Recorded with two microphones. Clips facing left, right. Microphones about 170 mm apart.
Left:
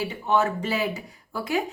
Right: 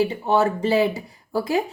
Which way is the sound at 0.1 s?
35° right (ahead or behind).